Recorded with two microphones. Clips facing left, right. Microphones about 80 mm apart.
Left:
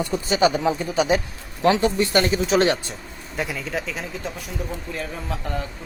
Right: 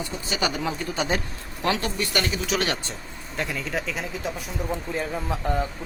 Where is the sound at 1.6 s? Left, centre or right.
Left.